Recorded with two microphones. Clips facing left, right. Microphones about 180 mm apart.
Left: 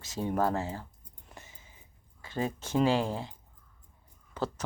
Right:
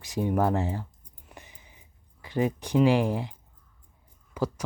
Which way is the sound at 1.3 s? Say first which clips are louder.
Right 2 dB; 15° right (ahead or behind).